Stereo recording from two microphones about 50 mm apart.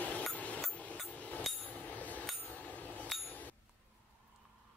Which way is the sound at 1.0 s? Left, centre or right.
Left.